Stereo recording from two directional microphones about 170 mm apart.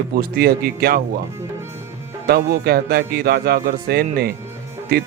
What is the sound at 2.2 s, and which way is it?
Speech, 65° right (ahead or behind).